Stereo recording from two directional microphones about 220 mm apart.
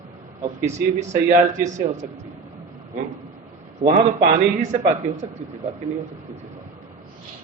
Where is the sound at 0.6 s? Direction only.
30° right (ahead or behind).